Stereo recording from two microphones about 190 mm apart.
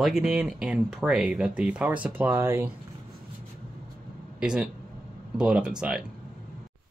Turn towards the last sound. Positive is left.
turn(degrees=-5)  # may be behind; listen again after turning